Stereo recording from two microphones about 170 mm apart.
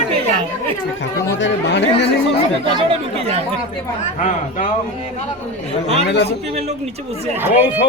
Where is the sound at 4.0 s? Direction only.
45° left (ahead or behind).